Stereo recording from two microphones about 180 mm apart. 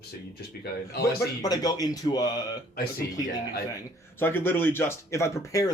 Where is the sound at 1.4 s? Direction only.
20° left (ahead or behind).